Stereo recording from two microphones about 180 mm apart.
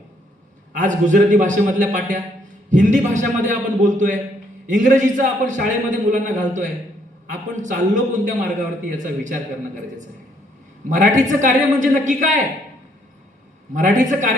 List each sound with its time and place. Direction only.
0.7 s a man's voice: 45° right (ahead or behind)
10.8 s a man's voice: 45° right (ahead or behind)
13.7 s a man's voice: 45° right (ahead or behind)